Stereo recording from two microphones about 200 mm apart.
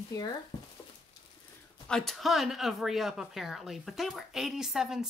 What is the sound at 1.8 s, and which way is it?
Speech, centre (ahead or behind).